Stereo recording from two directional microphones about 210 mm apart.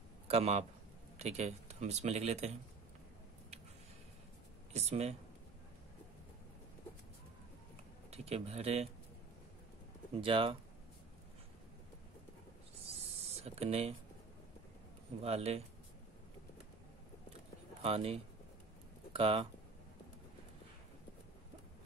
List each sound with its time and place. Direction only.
0.3 s speech: 30° right (ahead or behind)
4.7 s speech: 30° right (ahead or behind)
8.1 s speech: 30° right (ahead or behind)
10.1 s speech: 25° right (ahead or behind)
13.4 s speech: 30° right (ahead or behind)
15.2 s speech: 30° right (ahead or behind)
17.8 s speech: 30° right (ahead or behind)